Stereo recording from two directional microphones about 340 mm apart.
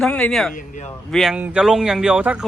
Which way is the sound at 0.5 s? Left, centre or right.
Left.